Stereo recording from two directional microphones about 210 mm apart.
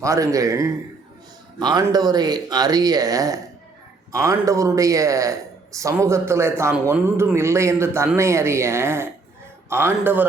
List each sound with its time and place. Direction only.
0.0 s a man's voice: 15° right (ahead or behind)